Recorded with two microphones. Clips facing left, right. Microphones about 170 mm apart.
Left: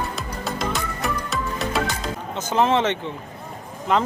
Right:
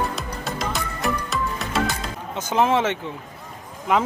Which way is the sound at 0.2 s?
Centre (ahead or behind).